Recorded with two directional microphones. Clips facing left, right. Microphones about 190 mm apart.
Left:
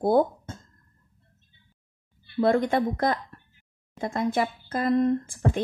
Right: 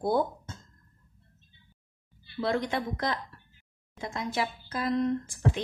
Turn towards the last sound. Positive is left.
turn(degrees=50)  # may be behind; listen again after turning